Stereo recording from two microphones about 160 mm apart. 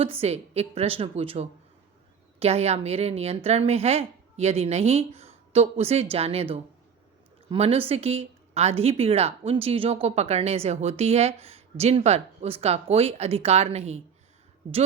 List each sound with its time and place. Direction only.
0.0 s speech: 40° right (ahead or behind)